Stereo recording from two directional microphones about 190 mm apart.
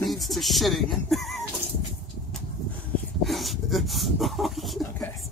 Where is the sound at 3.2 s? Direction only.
Centre (ahead or behind).